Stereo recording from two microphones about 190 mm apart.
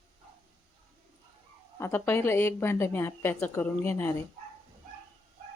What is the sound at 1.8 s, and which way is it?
A woman's voice, 10° left (ahead or behind).